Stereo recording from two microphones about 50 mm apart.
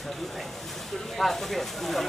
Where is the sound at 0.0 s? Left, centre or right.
Centre.